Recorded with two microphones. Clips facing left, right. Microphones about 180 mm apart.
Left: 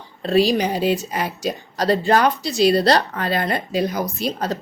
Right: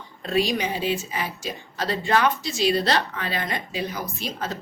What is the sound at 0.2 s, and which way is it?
A woman's voice, 35° left (ahead or behind).